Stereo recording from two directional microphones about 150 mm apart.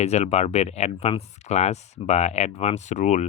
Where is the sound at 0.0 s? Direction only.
45° left (ahead or behind).